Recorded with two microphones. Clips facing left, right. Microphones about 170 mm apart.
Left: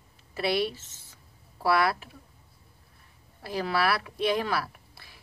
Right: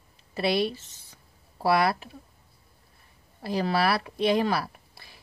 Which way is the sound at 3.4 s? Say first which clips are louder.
Right 2 dB; 30° right (ahead or behind).